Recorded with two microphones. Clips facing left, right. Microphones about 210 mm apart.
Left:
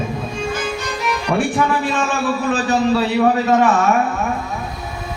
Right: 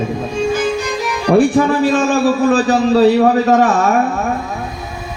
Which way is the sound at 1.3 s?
40° right (ahead or behind).